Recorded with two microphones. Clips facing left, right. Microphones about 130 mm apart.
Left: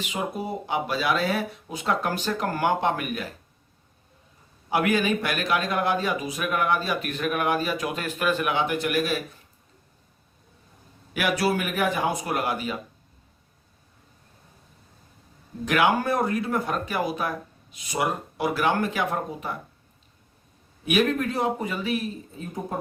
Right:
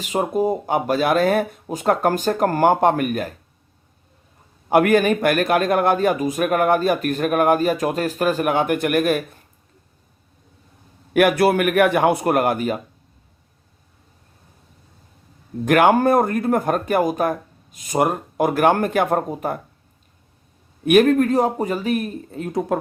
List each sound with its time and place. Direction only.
0.0 s a man's voice: 45° right (ahead or behind)
4.7 s a man's voice: 55° right (ahead or behind)
11.1 s a man's voice: 55° right (ahead or behind)
15.6 s a man's voice: 50° right (ahead or behind)
20.8 s a man's voice: 50° right (ahead or behind); by 22.8 s 80° right